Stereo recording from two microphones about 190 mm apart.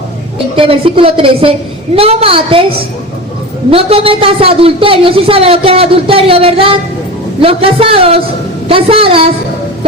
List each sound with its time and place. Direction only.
0.5 s a man's voice: 30° right (ahead or behind)